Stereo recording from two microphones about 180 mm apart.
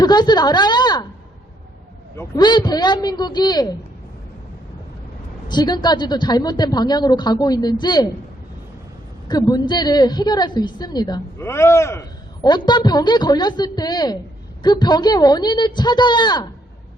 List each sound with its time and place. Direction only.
0.0 s a woman's voice: 25° left (ahead or behind)
2.1 s a woman's voice: 20° left (ahead or behind)
5.5 s a woman's voice: 25° left (ahead or behind)
9.3 s a woman's voice: 25° left (ahead or behind)